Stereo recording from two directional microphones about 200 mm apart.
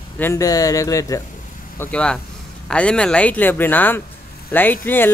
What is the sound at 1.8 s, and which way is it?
Speech, 5° left (ahead or behind).